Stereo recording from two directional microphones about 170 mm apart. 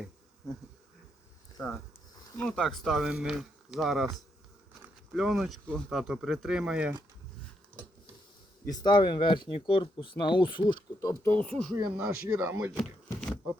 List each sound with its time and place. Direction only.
1.5 s speech: 15° left (ahead or behind)
2.4 s speech: 5° left (ahead or behind)
8.7 s speech: 25° left (ahead or behind)
11.3 s speech: 5° left (ahead or behind)
11.9 s speech: 10° right (ahead or behind)